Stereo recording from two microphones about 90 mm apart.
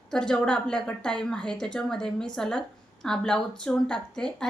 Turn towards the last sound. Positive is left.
turn(degrees=10)  # may be behind; listen again after turning